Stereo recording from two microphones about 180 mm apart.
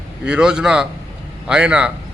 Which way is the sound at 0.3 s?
5° right (ahead or behind).